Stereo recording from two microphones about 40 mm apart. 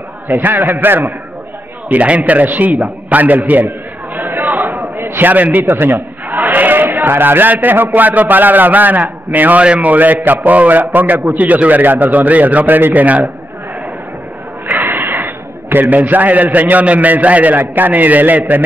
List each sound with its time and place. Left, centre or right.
0.3 s a man's voice: right
1.9 s a man's voice: right
3.2 s a sound: right
5.7 s a man's voice: right
6.2 s a sound: right
7.6 s a man's voice: right
9.6 s a man's voice: right
14.7 s a sound: right
16.8 s a man's voice: right